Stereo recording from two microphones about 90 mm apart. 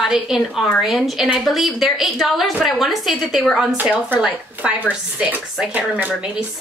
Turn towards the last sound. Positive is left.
turn(degrees=-15)  # may be behind; listen again after turning